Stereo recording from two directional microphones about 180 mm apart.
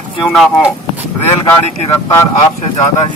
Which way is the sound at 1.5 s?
15° left (ahead or behind).